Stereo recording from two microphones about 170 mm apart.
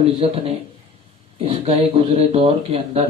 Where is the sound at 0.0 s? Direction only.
35° right (ahead or behind).